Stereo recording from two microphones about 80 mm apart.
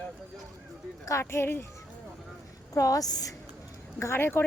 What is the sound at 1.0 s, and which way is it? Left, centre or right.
Speech, left.